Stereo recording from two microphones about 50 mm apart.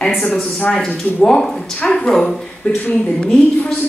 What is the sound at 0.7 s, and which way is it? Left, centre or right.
Speech, centre.